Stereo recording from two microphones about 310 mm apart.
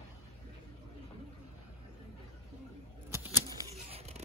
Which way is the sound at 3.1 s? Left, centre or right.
Centre.